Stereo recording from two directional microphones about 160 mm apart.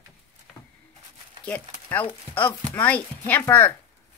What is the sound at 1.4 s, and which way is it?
Speech, 10° left (ahead or behind).